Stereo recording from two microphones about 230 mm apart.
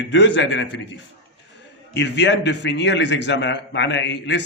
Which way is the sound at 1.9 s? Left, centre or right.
Left.